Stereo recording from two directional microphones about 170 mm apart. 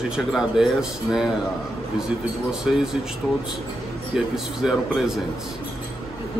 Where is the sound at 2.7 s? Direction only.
Centre (ahead or behind).